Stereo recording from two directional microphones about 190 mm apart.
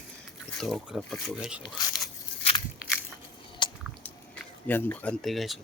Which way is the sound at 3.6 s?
25° left (ahead or behind).